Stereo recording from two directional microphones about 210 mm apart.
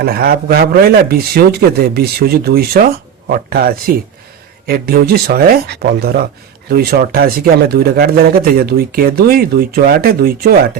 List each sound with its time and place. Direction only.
0.0 s speech: 45° right (ahead or behind)